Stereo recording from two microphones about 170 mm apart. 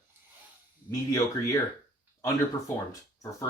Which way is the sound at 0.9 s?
20° left (ahead or behind).